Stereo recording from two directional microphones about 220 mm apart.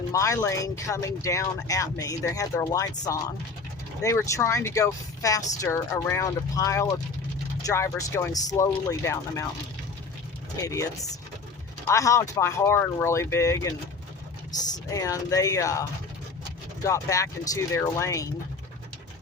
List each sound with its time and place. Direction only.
0.1 s speech: 15° left (ahead or behind)
10.6 s speech: 15° left (ahead or behind)
14.8 s speech: 15° left (ahead or behind)
16.8 s speech: 15° left (ahead or behind)